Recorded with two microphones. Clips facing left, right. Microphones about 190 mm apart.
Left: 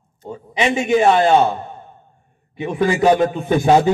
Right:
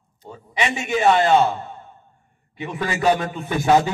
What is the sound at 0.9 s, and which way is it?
Speech, 25° left (ahead or behind).